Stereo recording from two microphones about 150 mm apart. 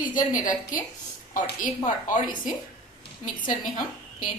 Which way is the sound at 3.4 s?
65° left (ahead or behind).